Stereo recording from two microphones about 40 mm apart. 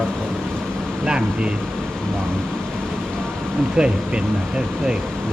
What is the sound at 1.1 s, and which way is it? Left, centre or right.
Speech, right.